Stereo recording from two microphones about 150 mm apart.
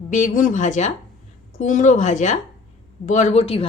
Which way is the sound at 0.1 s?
55° left (ahead or behind).